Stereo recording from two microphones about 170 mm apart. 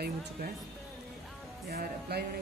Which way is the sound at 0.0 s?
70° right (ahead or behind).